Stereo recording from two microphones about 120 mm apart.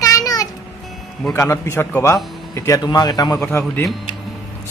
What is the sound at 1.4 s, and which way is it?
A child's voice, 20° left (ahead or behind).